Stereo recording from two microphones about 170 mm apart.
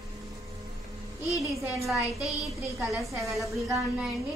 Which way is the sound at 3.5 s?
15° right (ahead or behind).